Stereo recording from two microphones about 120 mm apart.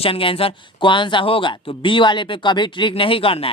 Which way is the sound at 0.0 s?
50° left (ahead or behind).